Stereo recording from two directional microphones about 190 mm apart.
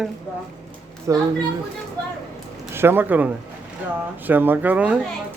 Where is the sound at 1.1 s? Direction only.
15° right (ahead or behind).